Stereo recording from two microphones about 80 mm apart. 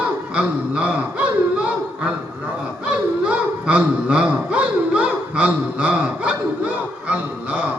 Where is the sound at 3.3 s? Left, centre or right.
Centre.